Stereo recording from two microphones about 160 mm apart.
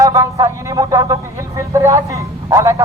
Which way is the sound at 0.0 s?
20° right (ahead or behind).